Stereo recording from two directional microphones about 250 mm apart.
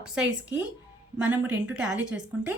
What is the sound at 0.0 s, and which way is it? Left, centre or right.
Speech, centre.